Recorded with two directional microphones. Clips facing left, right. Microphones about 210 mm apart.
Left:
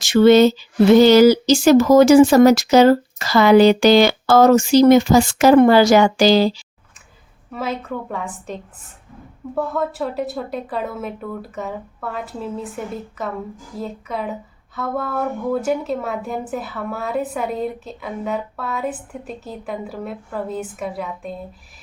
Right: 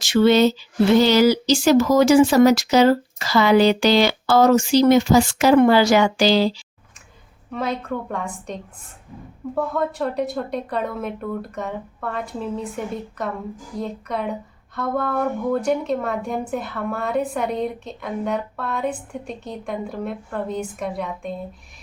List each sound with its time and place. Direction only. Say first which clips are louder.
0.0 s speech: left 4 dB; 50° left (ahead or behind)
7.5 s a woman's voice: even; 5° left (ahead or behind)
9.6 s a woman's voice: left 1 dB; centre (ahead or behind)